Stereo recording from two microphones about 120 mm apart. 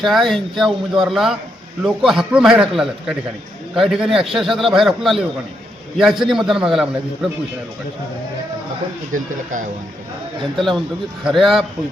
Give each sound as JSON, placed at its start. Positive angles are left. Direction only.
{"t": 0.0, "sound": "a man's voice", "side_deg": 0}
{"t": 9.1, "sound": "speech", "side_deg": -90}
{"t": 11.2, "sound": "a man's voice", "side_deg": 0}